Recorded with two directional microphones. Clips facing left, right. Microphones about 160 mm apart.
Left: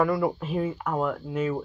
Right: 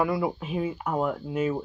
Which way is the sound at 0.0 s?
5° right (ahead or behind).